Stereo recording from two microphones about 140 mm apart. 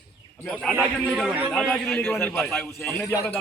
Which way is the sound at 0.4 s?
Centre (ahead or behind).